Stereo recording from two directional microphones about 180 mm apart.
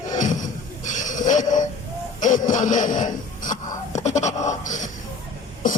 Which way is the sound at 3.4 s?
45° left (ahead or behind).